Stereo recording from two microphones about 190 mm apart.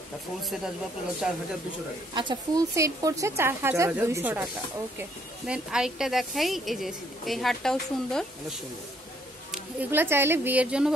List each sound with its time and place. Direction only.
1.2 s a woman's voice: 5° right (ahead or behind)
2.1 s speech: 20° right (ahead or behind)
5.5 s a woman's voice: 5° right (ahead or behind)
9.5 s speech: 10° right (ahead or behind)